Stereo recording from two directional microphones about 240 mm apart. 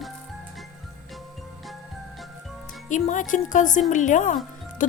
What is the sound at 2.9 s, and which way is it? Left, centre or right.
Speech, left.